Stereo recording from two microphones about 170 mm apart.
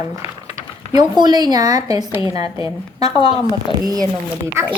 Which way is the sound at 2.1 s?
30° left (ahead or behind).